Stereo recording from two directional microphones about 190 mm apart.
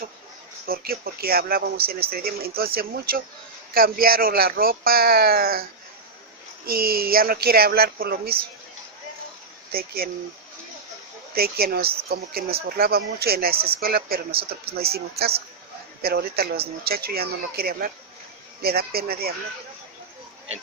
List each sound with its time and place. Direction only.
0.7 s speech: 50° right (ahead or behind)
6.7 s speech: 50° right (ahead or behind)
9.7 s speech: 50° right (ahead or behind)
11.3 s speech: 55° right (ahead or behind)